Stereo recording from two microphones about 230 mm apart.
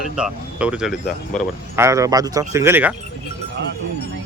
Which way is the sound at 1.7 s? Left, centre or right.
Centre.